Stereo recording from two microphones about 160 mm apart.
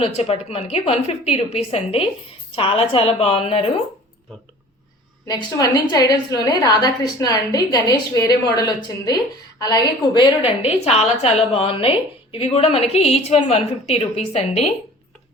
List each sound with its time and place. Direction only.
0.0 s a woman's voice: 40° left (ahead or behind)
5.3 s a woman's voice: 25° left (ahead or behind); by 14.7 s 40° left (ahead or behind)